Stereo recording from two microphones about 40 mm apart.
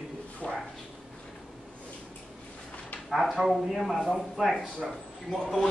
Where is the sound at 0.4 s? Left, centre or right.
Left.